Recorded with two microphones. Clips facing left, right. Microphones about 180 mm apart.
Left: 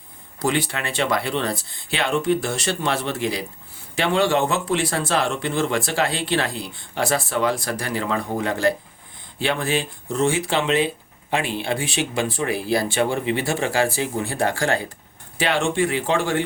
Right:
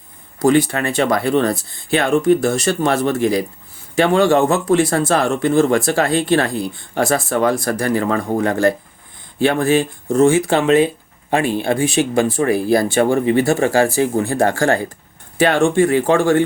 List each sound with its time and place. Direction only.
0.3 s speech: 45° right (ahead or behind)